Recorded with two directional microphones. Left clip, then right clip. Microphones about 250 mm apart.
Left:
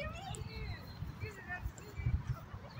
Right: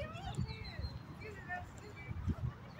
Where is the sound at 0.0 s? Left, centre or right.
Centre.